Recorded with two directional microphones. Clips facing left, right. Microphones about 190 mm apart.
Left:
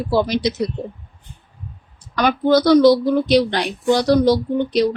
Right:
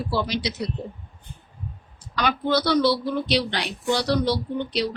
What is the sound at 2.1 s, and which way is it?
Speech, 45° left (ahead or behind).